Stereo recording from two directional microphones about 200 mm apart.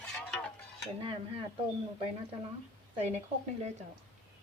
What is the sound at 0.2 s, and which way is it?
Mechanisms, 5° left (ahead or behind).